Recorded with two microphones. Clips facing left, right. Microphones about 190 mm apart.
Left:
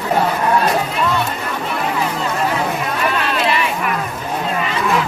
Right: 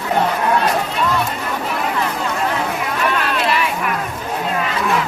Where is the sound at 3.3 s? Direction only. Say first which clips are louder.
Left 1 dB; centre (ahead or behind).